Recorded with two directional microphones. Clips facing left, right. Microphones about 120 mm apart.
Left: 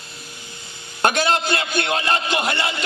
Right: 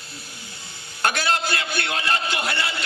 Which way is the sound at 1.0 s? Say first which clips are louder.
Left 4 dB; 20° left (ahead or behind).